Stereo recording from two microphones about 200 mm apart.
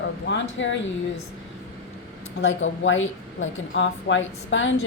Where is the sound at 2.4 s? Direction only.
75° left (ahead or behind).